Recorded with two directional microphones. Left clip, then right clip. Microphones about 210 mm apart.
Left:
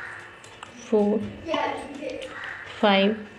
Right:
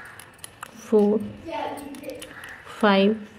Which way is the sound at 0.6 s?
35° right (ahead or behind).